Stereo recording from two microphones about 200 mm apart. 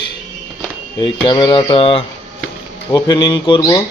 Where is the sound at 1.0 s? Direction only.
25° left (ahead or behind).